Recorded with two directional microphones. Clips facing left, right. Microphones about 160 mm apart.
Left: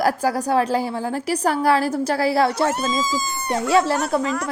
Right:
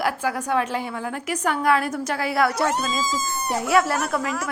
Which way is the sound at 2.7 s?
20° right (ahead or behind).